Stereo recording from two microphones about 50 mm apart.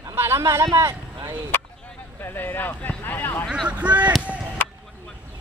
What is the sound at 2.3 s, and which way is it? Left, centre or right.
Speech, left.